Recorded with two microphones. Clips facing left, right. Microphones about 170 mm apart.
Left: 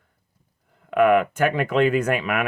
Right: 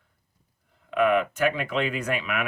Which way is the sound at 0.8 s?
50° left (ahead or behind).